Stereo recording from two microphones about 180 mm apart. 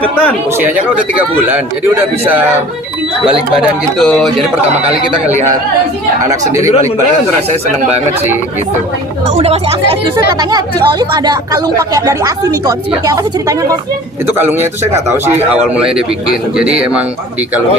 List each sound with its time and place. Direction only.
1.1 s speech: 10° right (ahead or behind)
3.6 s speech: centre (ahead or behind)
9.3 s speech: 35° right (ahead or behind)
10.5 s speech: 25° right (ahead or behind)
16.6 s speech: 5° right (ahead or behind)